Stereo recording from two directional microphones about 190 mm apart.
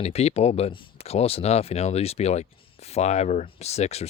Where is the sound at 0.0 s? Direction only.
35° left (ahead or behind).